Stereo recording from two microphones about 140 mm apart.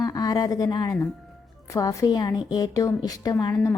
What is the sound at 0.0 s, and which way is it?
A woman's voice, 25° left (ahead or behind).